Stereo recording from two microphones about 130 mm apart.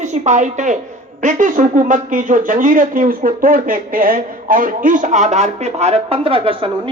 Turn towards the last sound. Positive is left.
turn(degrees=-45)  # may be behind; listen again after turning